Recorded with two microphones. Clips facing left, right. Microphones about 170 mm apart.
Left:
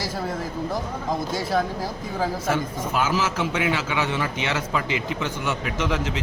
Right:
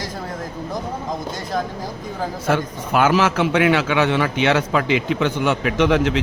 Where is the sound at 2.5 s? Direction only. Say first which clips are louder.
Right 4 dB; 70° right (ahead or behind).